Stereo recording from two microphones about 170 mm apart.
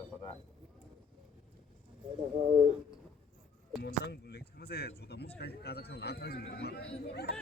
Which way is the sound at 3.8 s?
75° left (ahead or behind).